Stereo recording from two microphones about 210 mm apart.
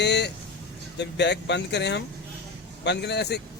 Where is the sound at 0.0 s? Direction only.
55° left (ahead or behind).